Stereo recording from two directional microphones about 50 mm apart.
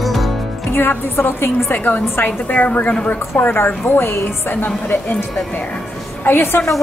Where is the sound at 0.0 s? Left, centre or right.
Centre.